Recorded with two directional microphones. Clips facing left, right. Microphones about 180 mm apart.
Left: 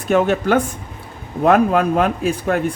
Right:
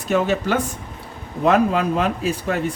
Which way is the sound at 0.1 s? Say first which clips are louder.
Left 4 dB; 50° left (ahead or behind).